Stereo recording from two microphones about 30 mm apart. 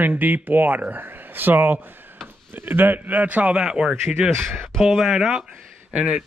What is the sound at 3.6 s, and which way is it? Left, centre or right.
Speech, right.